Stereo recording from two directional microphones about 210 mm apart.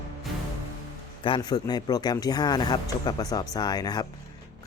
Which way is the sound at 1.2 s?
20° left (ahead or behind).